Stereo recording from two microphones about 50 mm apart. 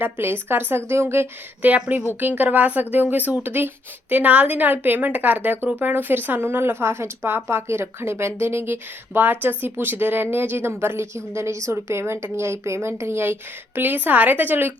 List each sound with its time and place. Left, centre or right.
0.0 s speech: right
1.6 s a woman's voice: right